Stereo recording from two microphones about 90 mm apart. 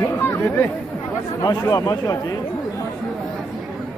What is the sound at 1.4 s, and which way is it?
Speech, 45° left (ahead or behind).